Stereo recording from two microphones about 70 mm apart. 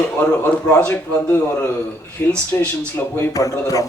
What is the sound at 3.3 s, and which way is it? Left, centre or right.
Speech, left.